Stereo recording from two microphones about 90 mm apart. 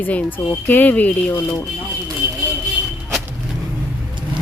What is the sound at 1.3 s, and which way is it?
Speech, 35° left (ahead or behind).